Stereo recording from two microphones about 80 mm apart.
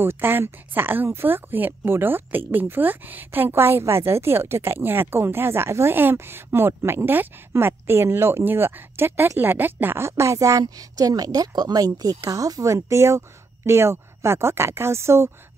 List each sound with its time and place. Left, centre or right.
0.0 s a woman's voice: right